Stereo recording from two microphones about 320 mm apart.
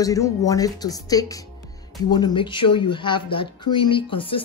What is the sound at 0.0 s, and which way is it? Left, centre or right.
Speech, centre.